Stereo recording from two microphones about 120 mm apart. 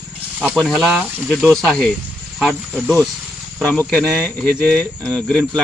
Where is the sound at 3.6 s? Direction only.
15° left (ahead or behind).